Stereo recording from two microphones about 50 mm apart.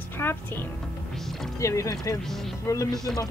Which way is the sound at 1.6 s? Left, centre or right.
Left.